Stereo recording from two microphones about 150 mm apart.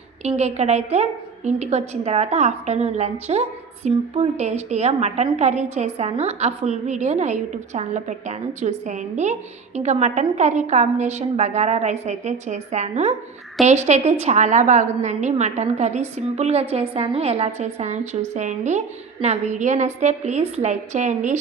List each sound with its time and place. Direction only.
0.2 s a woman's voice: 45° right (ahead or behind)